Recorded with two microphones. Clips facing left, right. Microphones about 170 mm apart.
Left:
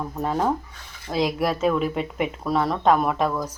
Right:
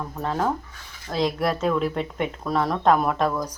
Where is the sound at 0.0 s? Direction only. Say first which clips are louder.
Left 2 dB; 10° left (ahead or behind).